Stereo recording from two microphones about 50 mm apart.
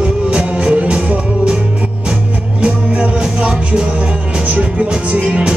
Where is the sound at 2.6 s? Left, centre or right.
Right.